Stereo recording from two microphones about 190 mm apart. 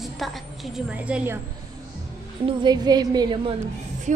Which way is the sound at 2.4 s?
20° right (ahead or behind).